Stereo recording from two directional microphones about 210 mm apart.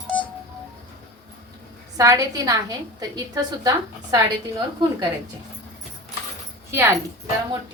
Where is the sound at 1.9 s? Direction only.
15° right (ahead or behind).